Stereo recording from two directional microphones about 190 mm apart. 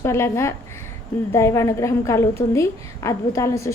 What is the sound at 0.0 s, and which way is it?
A woman's voice, 15° left (ahead or behind).